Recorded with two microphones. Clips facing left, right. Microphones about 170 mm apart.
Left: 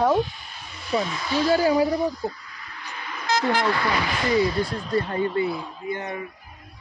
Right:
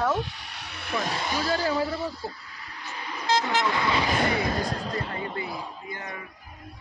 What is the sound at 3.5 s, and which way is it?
Speech, 20° right (ahead or behind).